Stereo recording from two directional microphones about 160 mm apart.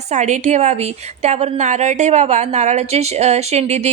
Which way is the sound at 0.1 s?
45° right (ahead or behind).